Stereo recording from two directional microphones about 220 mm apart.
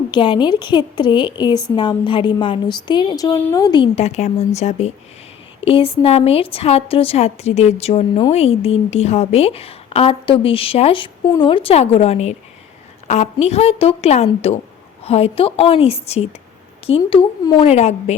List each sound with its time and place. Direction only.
0.1 s a woman's voice: 20° left (ahead or behind)